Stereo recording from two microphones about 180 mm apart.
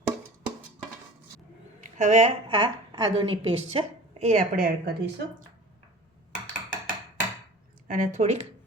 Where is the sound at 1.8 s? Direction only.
40° right (ahead or behind).